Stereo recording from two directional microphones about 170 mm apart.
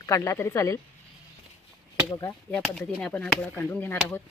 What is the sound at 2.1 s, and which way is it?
Speech, 15° left (ahead or behind).